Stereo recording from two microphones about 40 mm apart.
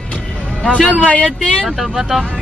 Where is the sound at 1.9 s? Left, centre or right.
Centre.